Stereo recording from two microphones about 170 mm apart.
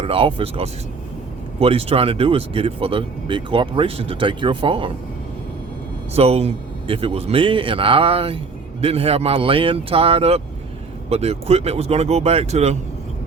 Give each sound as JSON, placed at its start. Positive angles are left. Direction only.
{"t": 0.0, "sound": "speech", "side_deg": -35}
{"t": 6.1, "sound": "speech", "side_deg": -35}